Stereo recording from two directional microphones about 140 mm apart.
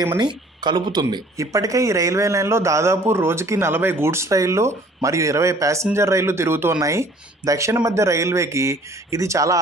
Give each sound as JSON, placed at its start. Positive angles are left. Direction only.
{"t": 0.2, "sound": "speech", "side_deg": -30}